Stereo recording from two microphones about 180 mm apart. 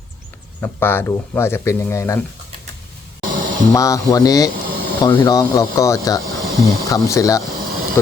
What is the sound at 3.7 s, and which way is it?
Speech, 20° left (ahead or behind).